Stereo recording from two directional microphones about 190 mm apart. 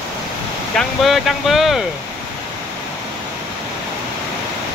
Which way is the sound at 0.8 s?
Centre (ahead or behind).